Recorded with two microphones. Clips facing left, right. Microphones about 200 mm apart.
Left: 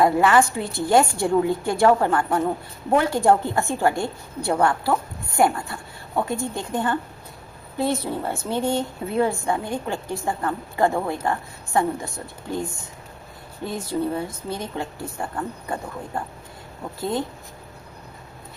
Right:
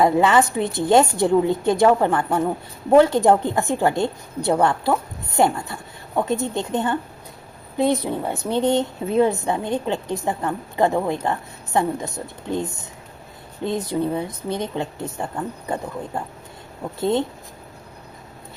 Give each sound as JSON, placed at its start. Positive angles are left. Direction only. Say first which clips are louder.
{"t": 0.0, "sound": "a woman's voice", "louder": "right 1 dB", "side_deg": -20}